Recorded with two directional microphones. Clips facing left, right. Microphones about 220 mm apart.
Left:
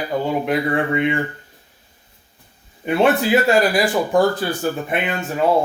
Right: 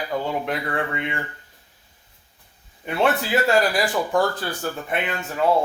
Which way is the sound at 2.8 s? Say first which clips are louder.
Left 6 dB; 15° left (ahead or behind).